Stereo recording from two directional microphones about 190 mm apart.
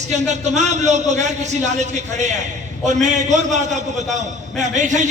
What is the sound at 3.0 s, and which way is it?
Speech, 40° right (ahead or behind).